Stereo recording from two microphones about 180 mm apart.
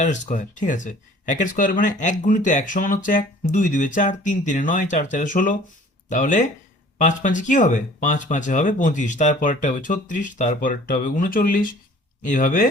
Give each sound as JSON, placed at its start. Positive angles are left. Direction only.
{"t": 0.0, "sound": "speech", "side_deg": 45}